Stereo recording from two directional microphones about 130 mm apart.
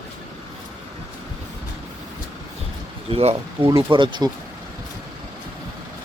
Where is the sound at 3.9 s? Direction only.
35° right (ahead or behind).